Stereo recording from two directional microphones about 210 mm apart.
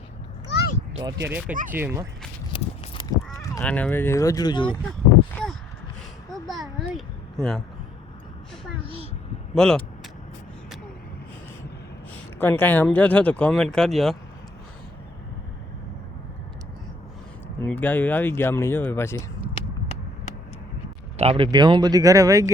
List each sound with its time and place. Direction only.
0.5 s a sound: 50° left (ahead or behind)
1.2 s speech: 10° right (ahead or behind)
3.1 s honk: 15° left (ahead or behind)
3.6 s speech: 5° left (ahead or behind); by 4.8 s 20° left (ahead or behind)
5.3 s a sound: 5° left (ahead or behind)
6.3 s speech: centre (ahead or behind)
9.6 s speech: 5° left (ahead or behind)
12.4 s speech: 10° left (ahead or behind)
17.6 s speech: 10° left (ahead or behind)
19.5 s a sound: 30° left (ahead or behind)
21.2 s speech: 25° right (ahead or behind)